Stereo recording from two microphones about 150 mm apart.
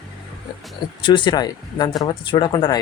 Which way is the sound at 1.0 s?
35° left (ahead or behind).